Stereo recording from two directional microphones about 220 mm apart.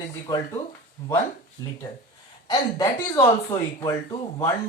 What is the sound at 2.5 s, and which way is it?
Speech, 15° left (ahead or behind).